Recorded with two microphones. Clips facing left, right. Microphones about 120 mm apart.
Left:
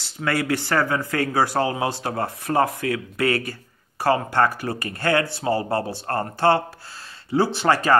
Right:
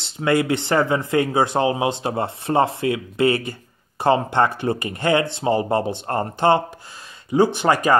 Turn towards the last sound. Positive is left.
turn(degrees=-15)  # may be behind; listen again after turning